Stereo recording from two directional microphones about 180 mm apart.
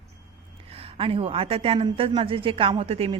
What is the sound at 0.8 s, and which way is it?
Speech, 30° right (ahead or behind).